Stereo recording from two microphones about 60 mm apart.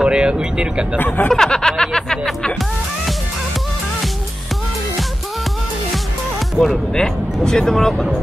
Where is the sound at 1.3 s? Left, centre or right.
Centre.